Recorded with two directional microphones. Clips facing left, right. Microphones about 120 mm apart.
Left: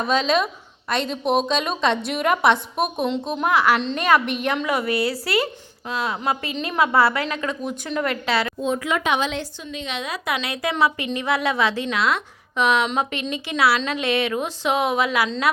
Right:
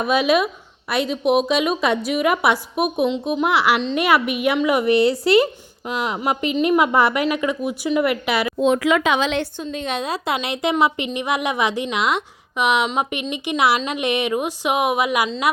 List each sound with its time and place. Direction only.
0.0 s a woman's voice: 10° right (ahead or behind)
8.5 s speech: 85° right
9.7 s a woman's voice: 45° right (ahead or behind); by 15.3 s 15° right (ahead or behind)